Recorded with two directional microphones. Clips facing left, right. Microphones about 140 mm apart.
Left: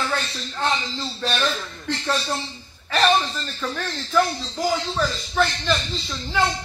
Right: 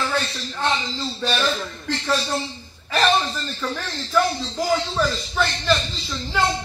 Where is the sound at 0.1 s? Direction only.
Centre (ahead or behind).